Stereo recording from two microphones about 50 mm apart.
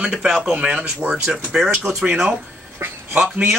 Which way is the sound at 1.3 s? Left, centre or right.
Centre.